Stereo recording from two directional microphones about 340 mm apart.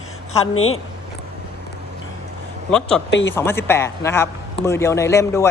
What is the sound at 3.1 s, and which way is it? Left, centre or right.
Speech, left.